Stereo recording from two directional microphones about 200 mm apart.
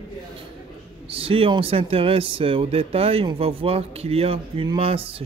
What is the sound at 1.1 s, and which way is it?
Speech, 25° right (ahead or behind).